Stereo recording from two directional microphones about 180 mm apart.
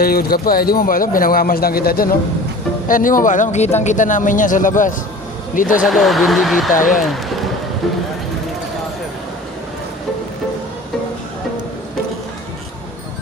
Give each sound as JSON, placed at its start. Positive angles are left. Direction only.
{"t": 0.0, "sound": "speech", "side_deg": 55}
{"t": 5.8, "sound": "speech", "side_deg": 0}
{"t": 6.7, "sound": "speech", "side_deg": 45}